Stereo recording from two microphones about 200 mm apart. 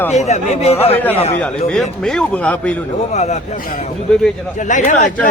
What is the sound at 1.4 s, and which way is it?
Speech, 5° left (ahead or behind).